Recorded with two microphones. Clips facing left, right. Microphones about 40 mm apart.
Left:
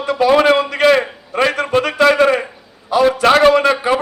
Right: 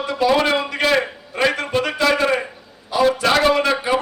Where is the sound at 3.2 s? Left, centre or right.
Left.